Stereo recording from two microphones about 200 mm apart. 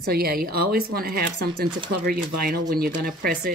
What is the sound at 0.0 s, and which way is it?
Speech, 50° right (ahead or behind).